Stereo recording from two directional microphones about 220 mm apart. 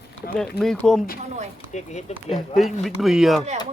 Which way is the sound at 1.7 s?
30° left (ahead or behind).